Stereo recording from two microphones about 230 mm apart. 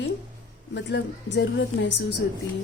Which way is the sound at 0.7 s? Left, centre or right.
Left.